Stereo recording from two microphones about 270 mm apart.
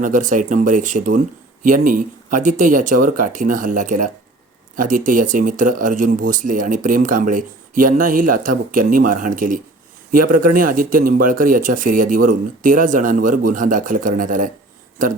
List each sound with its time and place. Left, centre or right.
0.0 s speech: right